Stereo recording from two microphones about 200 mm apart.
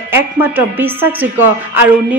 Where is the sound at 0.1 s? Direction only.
10° right (ahead or behind).